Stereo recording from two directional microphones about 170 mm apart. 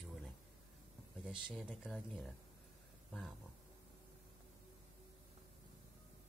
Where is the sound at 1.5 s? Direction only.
5° right (ahead or behind).